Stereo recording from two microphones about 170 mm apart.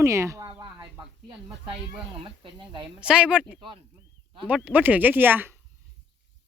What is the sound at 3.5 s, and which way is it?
Speech, 30° right (ahead or behind).